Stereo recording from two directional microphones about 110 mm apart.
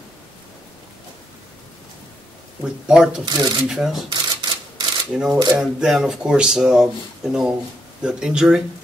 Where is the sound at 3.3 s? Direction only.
35° right (ahead or behind).